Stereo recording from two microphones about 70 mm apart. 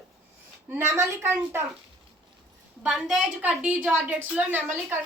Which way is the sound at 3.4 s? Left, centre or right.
Right.